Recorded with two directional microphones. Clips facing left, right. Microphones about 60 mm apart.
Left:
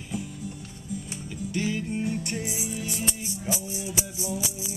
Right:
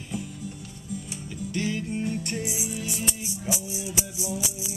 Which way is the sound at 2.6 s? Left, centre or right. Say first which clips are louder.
Even; centre.